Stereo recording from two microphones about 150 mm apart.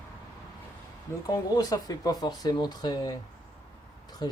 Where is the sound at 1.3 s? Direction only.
25° left (ahead or behind).